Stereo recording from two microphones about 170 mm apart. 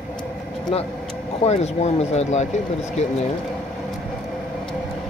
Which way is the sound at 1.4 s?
40° left (ahead or behind).